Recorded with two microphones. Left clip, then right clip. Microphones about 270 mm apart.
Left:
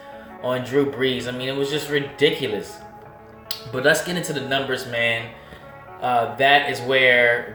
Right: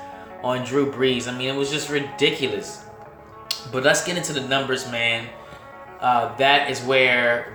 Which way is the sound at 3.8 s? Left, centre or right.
Right.